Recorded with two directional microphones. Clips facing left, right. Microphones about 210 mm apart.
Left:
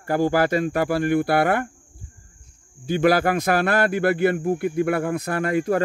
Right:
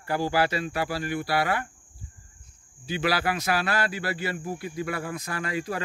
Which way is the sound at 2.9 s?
50° left (ahead or behind).